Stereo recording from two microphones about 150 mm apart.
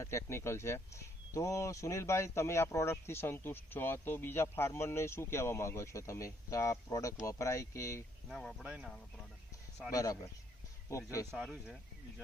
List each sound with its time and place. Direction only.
0.0 s speech: 20° left (ahead or behind)
8.3 s speech: 5° left (ahead or behind)
9.9 s speech: 25° left (ahead or behind)
11.3 s speech: 5° right (ahead or behind)